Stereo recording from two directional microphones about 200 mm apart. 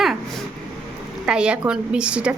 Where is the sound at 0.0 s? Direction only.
Centre (ahead or behind).